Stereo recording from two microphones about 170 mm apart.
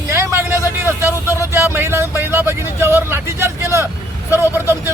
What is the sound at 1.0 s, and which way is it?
Vehicle, 20° left (ahead or behind).